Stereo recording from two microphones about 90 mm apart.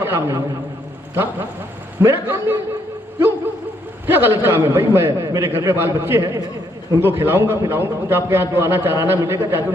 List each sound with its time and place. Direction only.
0.0 s a man's voice: 30° right (ahead or behind)
4.0 s a man's voice: 25° right (ahead or behind)
5.2 s a man's voice: 35° right (ahead or behind)